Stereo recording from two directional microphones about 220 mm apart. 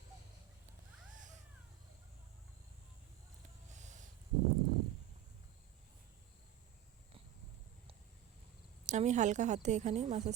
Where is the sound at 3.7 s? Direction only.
35° right (ahead or behind).